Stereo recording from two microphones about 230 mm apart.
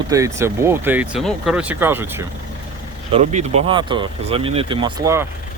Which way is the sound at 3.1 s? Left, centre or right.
Right.